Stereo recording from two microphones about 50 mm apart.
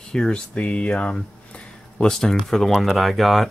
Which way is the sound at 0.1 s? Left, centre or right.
Centre.